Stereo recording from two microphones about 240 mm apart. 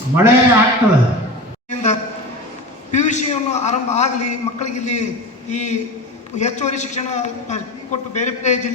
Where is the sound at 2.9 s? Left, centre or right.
Left.